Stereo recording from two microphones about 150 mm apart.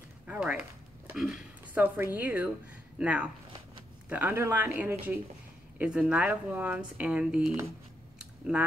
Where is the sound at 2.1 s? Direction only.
10° right (ahead or behind).